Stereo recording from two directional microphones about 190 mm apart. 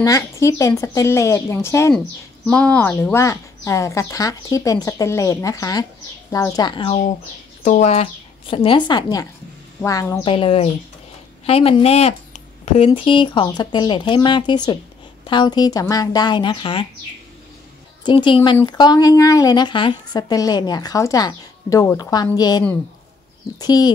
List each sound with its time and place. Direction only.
0.0 s speech: 15° left (ahead or behind)
10.2 s speech: 25° left (ahead or behind)
18.0 s speech: 25° left (ahead or behind)